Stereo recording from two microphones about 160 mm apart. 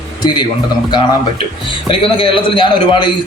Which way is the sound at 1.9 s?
35° left (ahead or behind).